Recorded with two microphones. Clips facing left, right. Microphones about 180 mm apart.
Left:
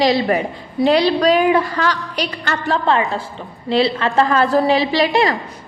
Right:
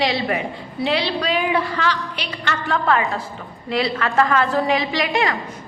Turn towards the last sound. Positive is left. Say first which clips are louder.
# left 5 dB
turn(degrees=35)  # may be behind; listen again after turning